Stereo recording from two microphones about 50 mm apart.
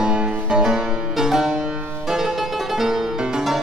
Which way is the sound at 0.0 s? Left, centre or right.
Centre.